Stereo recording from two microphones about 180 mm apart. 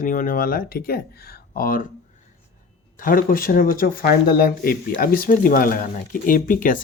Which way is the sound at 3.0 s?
50° left (ahead or behind).